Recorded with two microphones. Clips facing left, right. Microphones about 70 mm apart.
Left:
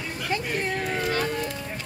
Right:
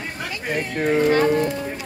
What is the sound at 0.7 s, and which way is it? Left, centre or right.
Speech, right.